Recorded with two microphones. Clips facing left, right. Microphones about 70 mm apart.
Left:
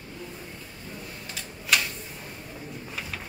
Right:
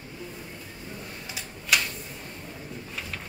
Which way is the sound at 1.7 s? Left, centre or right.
Centre.